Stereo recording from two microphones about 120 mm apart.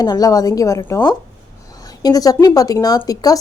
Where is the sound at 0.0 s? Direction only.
30° left (ahead or behind).